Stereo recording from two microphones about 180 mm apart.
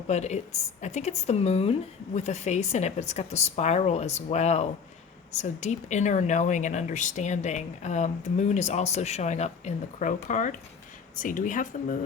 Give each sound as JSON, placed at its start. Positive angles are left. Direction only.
{"t": 0.1, "sound": "speech", "side_deg": 40}